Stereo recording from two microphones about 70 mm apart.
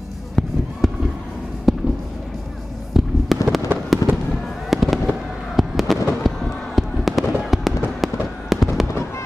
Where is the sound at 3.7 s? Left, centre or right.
Right.